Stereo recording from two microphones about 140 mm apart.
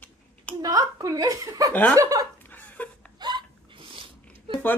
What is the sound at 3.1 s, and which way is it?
Hiccup, 30° right (ahead or behind).